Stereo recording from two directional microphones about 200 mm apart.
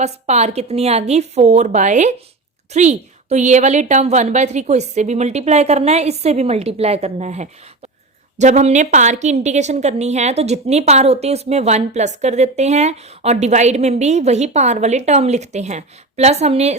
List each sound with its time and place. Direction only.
0.0 s a woman's voice: 35° right (ahead or behind)